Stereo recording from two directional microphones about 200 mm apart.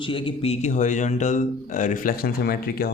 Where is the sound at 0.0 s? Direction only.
25° left (ahead or behind).